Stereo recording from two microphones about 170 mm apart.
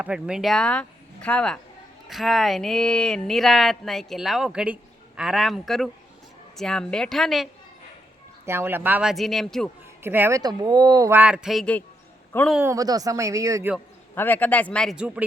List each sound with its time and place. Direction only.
0.0 s speech: 5° right (ahead or behind)
8.4 s speech: 15° right (ahead or behind)
10.0 s speech: 15° right (ahead or behind)
11.2 s speech: 5° right (ahead or behind)
12.6 s speech: 20° right (ahead or behind)
14.2 s speech: 10° left (ahead or behind)
14.9 s speech: 5° right (ahead or behind)